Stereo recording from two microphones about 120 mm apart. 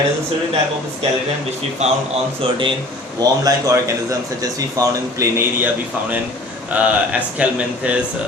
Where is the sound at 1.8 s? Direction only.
65° right (ahead or behind).